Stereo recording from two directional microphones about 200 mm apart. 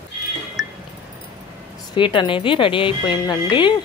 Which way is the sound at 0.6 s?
Centre (ahead or behind).